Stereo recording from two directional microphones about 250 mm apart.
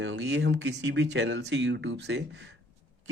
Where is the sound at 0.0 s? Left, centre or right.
Right.